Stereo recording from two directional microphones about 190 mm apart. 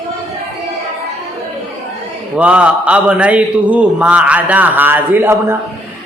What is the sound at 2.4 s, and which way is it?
Speech, 5° right (ahead or behind).